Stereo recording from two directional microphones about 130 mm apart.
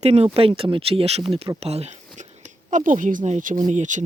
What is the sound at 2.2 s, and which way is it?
Speech, 65° right (ahead or behind).